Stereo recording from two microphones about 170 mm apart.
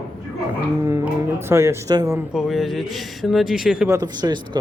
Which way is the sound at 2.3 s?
Centre (ahead or behind).